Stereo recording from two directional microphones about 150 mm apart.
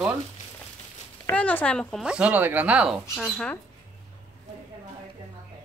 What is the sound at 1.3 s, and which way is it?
Speech, 10° left (ahead or behind).